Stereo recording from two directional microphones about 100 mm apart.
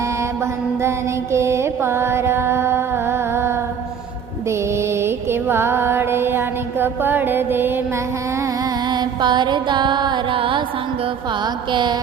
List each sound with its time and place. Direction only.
0.8 s mantra: 25° right (ahead or behind)
8.9 s music: 50° right (ahead or behind)
11.7 s a woman's voice: 50° right (ahead or behind)